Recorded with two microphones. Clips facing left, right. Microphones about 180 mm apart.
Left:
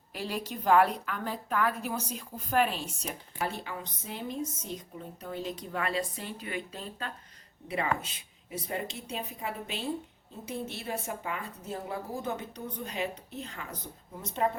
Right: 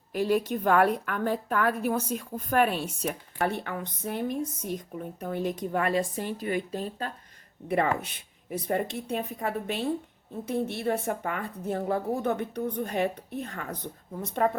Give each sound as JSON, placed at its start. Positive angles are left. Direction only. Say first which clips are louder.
{"t": 0.1, "sound": "a woman's voice", "louder": "right 10 dB", "side_deg": -50}
{"t": 7.7, "sound": "a woman's voice", "louder": "right 5 dB", "side_deg": -60}